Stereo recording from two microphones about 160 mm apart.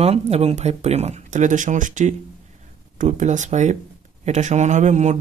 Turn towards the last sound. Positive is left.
turn(degrees=-45)  # may be behind; listen again after turning